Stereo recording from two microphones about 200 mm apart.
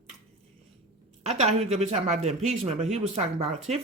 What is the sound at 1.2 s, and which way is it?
Speech, 35° right (ahead or behind).